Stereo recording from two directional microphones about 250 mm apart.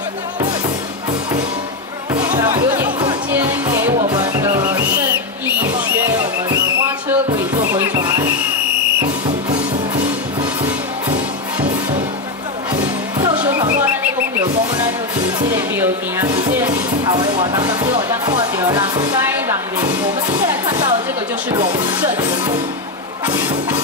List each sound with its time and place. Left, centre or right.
2.2 s music: centre
7.6 s music: centre
12.8 s music: centre
15.5 s music: centre
16.5 s speech: centre
21.5 s music: centre